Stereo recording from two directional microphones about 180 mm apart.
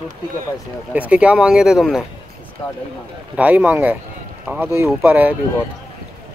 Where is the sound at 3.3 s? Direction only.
10° right (ahead or behind).